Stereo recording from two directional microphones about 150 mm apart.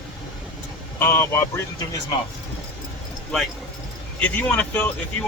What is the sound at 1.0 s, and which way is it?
Speech, 15° left (ahead or behind).